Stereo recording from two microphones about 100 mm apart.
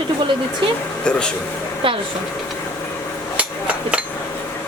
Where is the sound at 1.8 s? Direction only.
60° right (ahead or behind).